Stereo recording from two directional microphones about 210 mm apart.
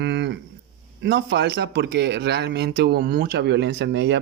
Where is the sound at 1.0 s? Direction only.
55° right (ahead or behind).